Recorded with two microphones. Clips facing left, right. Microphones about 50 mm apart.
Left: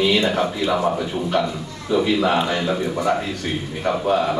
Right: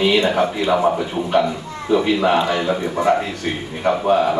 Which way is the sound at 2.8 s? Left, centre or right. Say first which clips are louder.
Right 3 dB; right.